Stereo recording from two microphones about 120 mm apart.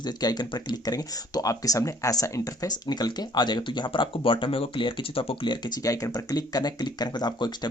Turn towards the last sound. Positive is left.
turn(degrees=35)  # may be behind; listen again after turning